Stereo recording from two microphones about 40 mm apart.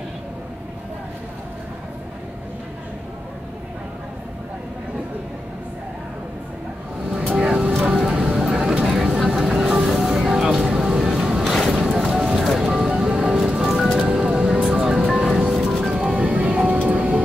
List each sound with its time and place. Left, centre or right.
7.3 s music: right
8.4 s a sound: centre
8.8 s vehicle: centre
10.6 s a sound: centre
11.8 s music: centre
12.9 s music: centre
15.9 s music: right